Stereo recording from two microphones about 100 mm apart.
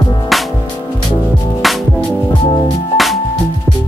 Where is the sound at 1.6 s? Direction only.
Centre (ahead or behind).